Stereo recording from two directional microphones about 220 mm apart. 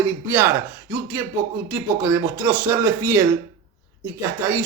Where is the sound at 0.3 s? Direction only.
10° right (ahead or behind).